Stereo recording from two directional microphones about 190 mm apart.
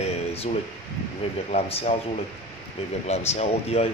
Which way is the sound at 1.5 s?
35° left (ahead or behind).